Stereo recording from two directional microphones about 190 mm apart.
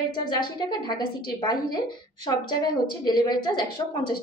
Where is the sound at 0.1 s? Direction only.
25° left (ahead or behind).